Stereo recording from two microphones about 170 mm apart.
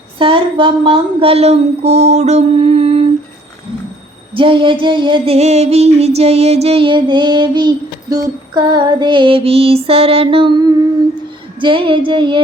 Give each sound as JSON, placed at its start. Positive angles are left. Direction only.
{"t": 0.2, "sound": "speech", "side_deg": -30}
{"t": 4.4, "sound": "music", "side_deg": -30}